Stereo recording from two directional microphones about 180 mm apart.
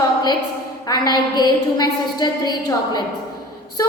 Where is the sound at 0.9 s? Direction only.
25° left (ahead or behind).